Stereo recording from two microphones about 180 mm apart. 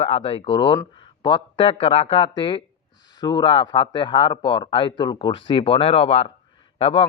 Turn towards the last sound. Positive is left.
turn(degrees=30)  # may be behind; listen again after turning